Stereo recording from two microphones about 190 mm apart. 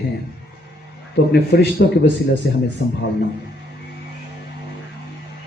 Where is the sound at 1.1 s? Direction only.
60° left (ahead or behind).